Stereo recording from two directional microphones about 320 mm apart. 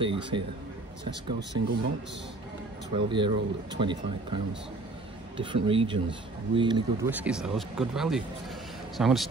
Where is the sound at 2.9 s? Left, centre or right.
Centre.